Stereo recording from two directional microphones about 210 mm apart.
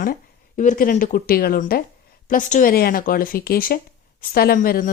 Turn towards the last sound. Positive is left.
turn(degrees=40)  # may be behind; listen again after turning